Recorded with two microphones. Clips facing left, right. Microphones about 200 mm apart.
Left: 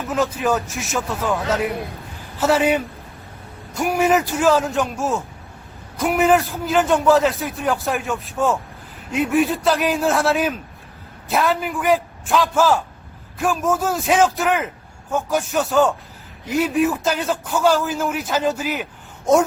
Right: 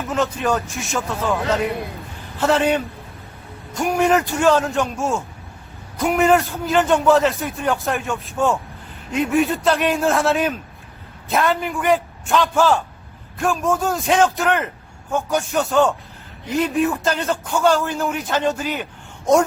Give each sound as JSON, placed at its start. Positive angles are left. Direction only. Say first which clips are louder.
{"t": 0.1, "sound": "a man's voice", "louder": "left 1 dB", "side_deg": 0}